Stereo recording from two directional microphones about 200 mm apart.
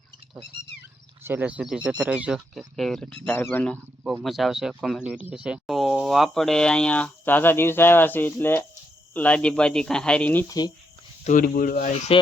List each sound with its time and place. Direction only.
1.2 s speech: 10° right (ahead or behind); by 10.7 s 15° left (ahead or behind)
11.2 s speech: 40° left (ahead or behind)